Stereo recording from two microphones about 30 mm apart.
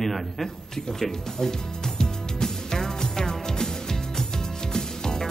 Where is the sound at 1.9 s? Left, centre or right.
Centre.